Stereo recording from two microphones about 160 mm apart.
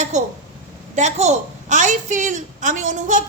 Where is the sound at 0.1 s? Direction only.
45° right (ahead or behind).